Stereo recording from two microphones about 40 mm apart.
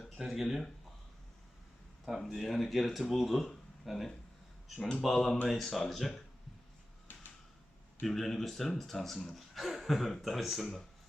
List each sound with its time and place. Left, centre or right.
0.0 s speech: centre
2.0 s speech: centre
7.1 s a sound: left
8.0 s speech: centre